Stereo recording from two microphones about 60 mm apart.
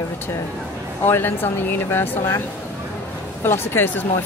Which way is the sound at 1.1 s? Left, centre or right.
Left.